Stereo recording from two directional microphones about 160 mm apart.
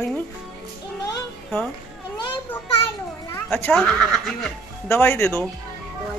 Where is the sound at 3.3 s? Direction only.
10° left (ahead or behind).